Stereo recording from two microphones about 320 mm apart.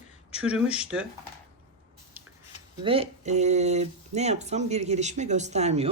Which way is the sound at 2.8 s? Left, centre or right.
Centre.